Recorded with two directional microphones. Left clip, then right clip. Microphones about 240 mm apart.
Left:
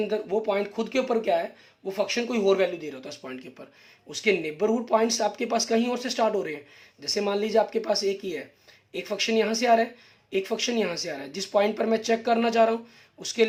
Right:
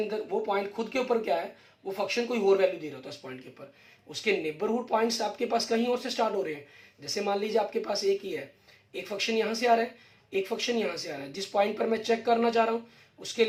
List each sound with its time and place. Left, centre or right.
0.1 s speech: left